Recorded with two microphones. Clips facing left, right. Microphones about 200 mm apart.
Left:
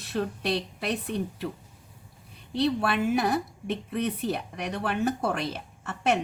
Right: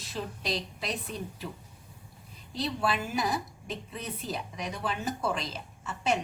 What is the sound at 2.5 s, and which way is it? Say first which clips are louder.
A woman's voice: left 5 dB; 65° left (ahead or behind).